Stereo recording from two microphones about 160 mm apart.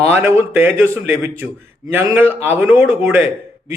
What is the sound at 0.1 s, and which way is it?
A man's voice, 15° right (ahead or behind).